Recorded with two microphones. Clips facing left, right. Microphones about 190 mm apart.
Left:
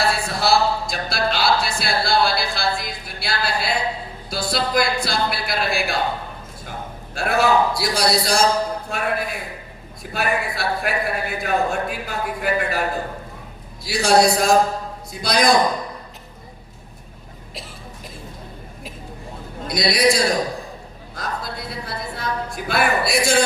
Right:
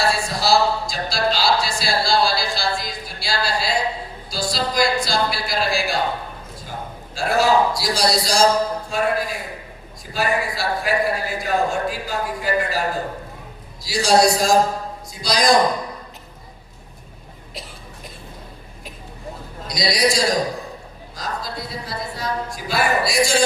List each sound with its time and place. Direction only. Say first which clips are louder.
0.1 s a sound: even; 60° left (ahead or behind)
4.3 s a man's voice: left 2 dB; 60° left (ahead or behind)
7.2 s a man's voice: right 1 dB; 60° left (ahead or behind)
13.8 s a man's voice: even; 60° left (ahead or behind)
19.6 s a man's voice: left 2 dB; 55° left (ahead or behind)